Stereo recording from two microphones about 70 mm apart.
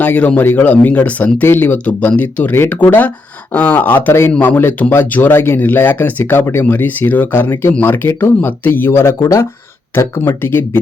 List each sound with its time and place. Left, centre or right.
0.0 s speech: left
6.4 s speech: left
9.9 s speech: left